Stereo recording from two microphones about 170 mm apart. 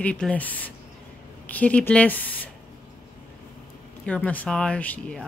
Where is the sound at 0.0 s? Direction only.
5° left (ahead or behind).